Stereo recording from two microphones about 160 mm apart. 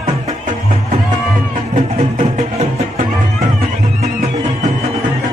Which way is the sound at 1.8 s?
55° right (ahead or behind).